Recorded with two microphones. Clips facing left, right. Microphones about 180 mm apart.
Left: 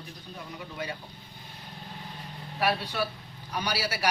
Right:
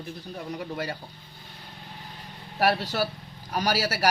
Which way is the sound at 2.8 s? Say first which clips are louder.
Right 3 dB; 90° right.